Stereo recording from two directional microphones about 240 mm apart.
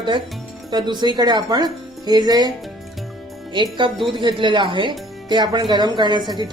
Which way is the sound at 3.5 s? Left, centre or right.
Centre.